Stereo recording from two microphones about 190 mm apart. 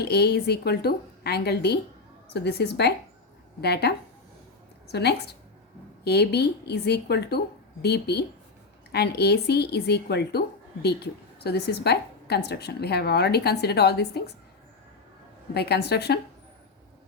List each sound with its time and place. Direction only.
0.0 s a woman's voice: 60° left (ahead or behind)
15.5 s a woman's voice: 60° left (ahead or behind)